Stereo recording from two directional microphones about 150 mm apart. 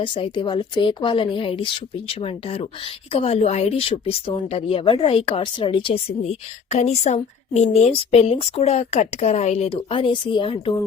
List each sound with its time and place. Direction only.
0.0 s speech: 35° left (ahead or behind)